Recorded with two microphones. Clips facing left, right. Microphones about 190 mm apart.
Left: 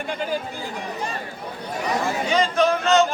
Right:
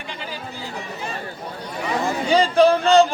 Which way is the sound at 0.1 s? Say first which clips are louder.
Left 6 dB; 50° left (ahead or behind).